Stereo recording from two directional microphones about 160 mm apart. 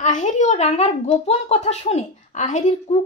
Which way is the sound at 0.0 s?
50° left (ahead or behind).